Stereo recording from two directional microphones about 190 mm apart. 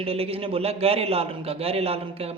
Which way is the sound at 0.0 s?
30° right (ahead or behind).